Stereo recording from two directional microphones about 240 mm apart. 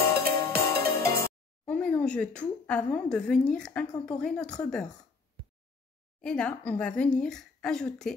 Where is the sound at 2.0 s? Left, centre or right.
Centre.